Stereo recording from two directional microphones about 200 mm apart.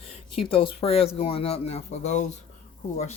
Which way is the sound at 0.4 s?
25° left (ahead or behind).